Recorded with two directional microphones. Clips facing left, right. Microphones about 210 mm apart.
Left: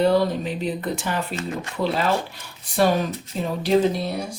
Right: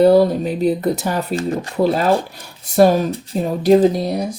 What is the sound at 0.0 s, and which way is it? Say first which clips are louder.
Speech: right 7 dB; 40° right (ahead or behind).